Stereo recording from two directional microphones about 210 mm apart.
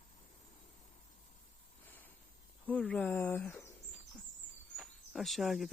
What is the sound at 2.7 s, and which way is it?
Speech, 5° left (ahead or behind).